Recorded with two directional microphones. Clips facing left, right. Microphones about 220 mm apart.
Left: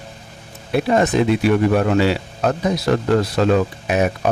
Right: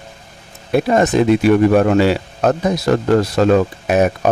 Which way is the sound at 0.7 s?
45° right (ahead or behind).